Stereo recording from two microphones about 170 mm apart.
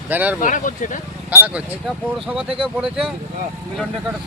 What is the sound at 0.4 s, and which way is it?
Speech, 50° left (ahead or behind).